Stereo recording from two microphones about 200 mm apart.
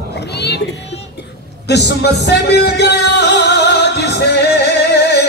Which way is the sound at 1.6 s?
55° left (ahead or behind).